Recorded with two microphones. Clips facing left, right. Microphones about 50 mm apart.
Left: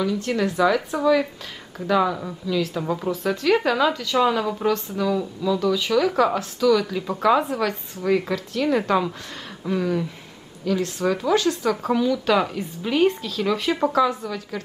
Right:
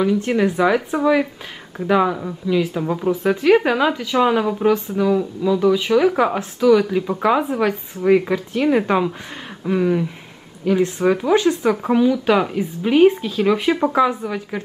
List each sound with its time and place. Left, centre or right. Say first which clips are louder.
0.0 s speech: right 5 dB; right
2.8 s speech: right 3 dB; centre
3.1 s speech: right 6 dB; right